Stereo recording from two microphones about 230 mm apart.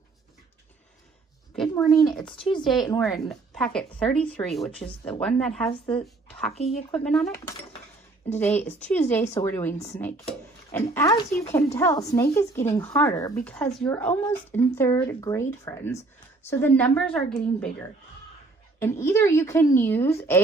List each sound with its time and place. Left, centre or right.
1.5 s a child's voice: centre
5.7 s a woman's voice: left
6.0 s a sound: centre
6.5 s a woman's voice: left
7.1 s speech: centre
8.4 s speech: centre